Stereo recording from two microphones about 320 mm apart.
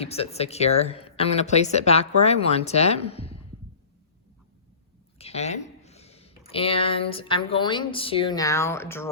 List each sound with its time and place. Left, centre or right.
0.0 s speech: centre
5.1 s a sound: centre
6.5 s speech: centre